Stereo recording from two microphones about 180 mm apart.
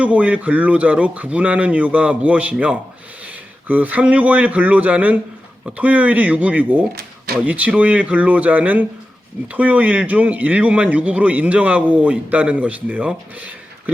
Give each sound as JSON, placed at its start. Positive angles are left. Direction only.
{"t": 0.0, "sound": "a man's voice", "side_deg": -5}